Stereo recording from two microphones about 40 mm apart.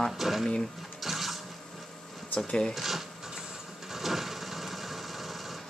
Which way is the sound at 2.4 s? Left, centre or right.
Left.